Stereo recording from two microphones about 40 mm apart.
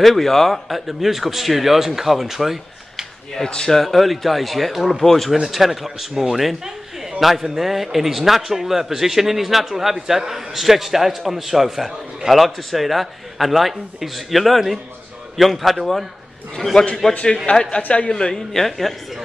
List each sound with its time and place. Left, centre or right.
0.0 s speech: centre
3.4 s a man's voice: left
3.7 s a man's voice: centre
16.5 s a man's voice: centre
18.3 s speech: centre